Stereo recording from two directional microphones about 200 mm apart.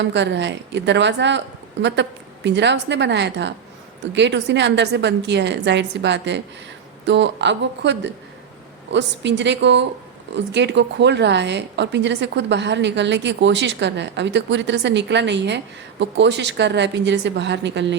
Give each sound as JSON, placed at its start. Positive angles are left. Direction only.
{"t": 0.0, "sound": "a woman's voice", "side_deg": -60}